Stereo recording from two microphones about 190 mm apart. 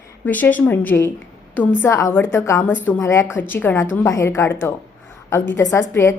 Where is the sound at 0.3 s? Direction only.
10° left (ahead or behind).